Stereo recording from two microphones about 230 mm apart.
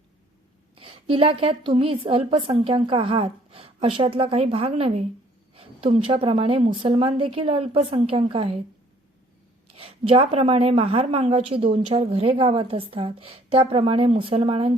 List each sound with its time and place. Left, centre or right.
0.8 s a woman's voice: right
5.5 s a sound: right
6.2 s a woman's voice: right
9.7 s a woman's voice: right